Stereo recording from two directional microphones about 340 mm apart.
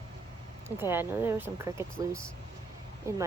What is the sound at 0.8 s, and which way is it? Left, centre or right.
Speech, centre.